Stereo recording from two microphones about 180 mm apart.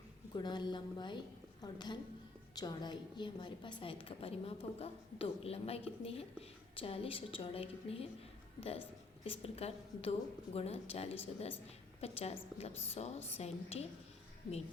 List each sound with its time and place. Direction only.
0.3 s a woman's voice: 25° left (ahead or behind)
9.2 s a woman's voice: 30° left (ahead or behind)